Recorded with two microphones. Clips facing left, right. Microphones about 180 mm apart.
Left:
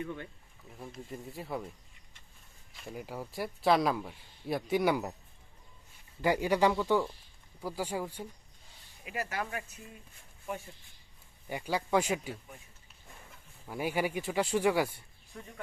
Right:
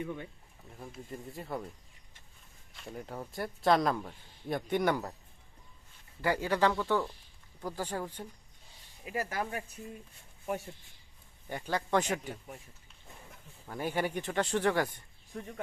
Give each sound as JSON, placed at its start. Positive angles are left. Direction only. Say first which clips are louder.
{"t": 0.8, "sound": "speech", "louder": "left 1 dB", "side_deg": 0}
{"t": 2.7, "sound": "speech", "louder": "left 1 dB", "side_deg": 5}
{"t": 6.2, "sound": "speech", "louder": "left 2 dB", "side_deg": 15}
{"t": 9.0, "sound": "speech", "louder": "right 2 dB", "side_deg": -35}
{"t": 11.4, "sound": "speech", "louder": "left 1 dB", "side_deg": 10}
{"t": 13.7, "sound": "speech", "louder": "left 1 dB", "side_deg": 10}